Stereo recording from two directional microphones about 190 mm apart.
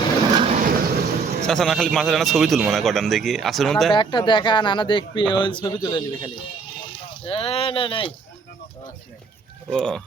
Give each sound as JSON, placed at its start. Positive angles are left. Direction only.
{"t": 0.6, "sound": "train", "side_deg": -55}
{"t": 1.5, "sound": "a man's voice", "side_deg": 0}
{"t": 3.9, "sound": "speech", "side_deg": 25}
{"t": 9.6, "sound": "a man's voice", "side_deg": 5}